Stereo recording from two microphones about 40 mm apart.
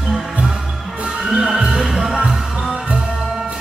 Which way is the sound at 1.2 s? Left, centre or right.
Centre.